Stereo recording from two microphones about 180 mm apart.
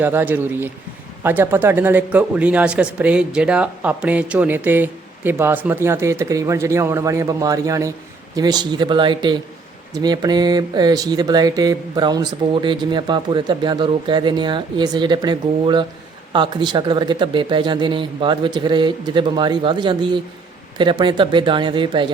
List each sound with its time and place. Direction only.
0.0 s speech: 10° right (ahead or behind); by 22.0 s 25° right (ahead or behind)